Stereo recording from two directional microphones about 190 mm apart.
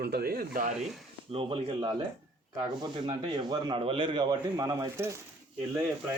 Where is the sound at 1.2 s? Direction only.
30° right (ahead or behind); by 5.2 s 15° right (ahead or behind).